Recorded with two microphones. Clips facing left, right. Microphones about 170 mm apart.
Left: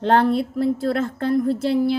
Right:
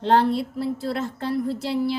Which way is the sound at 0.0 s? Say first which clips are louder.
Left 2 dB; 55° left (ahead or behind).